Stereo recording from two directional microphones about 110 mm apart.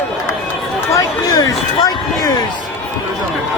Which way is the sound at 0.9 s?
35° left (ahead or behind).